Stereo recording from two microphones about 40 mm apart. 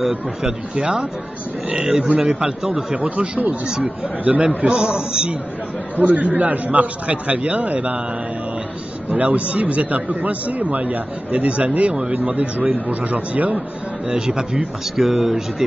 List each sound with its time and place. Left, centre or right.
0.0 s a man's voice: centre
3.0 s a man's voice: right
3.6 s a man's voice: centre
4.2 s a man's voice: right
4.6 s a man's voice: right
5.9 s a man's voice: right
9.1 s a man's voice: right
14.0 s speech: centre